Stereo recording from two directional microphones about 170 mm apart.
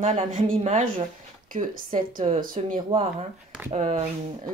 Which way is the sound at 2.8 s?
35° right (ahead or behind).